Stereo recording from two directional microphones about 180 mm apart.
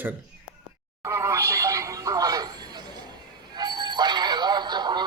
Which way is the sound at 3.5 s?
25° right (ahead or behind).